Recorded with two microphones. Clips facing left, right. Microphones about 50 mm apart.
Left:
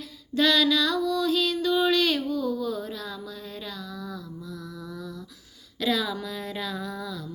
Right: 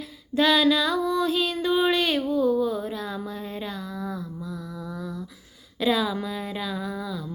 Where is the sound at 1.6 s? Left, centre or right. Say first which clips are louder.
Right 1 dB; right.